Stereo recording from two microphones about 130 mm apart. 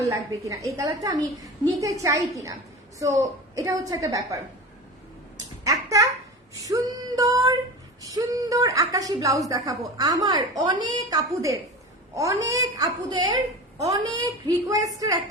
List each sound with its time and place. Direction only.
0.0 s a woman's voice: 25° right (ahead or behind)
5.6 s a sound: 25° right (ahead or behind)
6.7 s female singing: 30° right (ahead or behind)
8.0 s a woman's voice: 30° right (ahead or behind)